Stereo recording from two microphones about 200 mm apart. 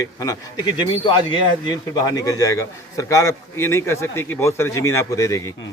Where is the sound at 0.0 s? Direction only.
20° left (ahead or behind).